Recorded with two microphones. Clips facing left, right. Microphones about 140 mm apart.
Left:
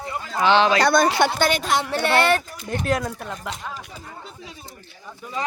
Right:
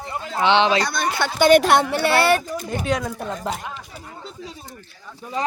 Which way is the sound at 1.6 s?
65° right (ahead or behind).